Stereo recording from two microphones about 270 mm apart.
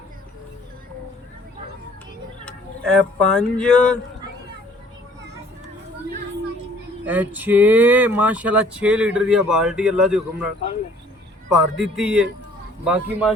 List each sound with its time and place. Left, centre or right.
2.4 s speech: centre
7.0 s speech: centre
11.5 s speech: centre